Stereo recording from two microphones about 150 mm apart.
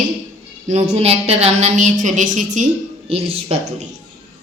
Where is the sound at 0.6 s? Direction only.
45° right (ahead or behind).